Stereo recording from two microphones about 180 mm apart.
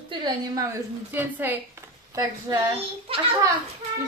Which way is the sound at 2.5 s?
25° right (ahead or behind).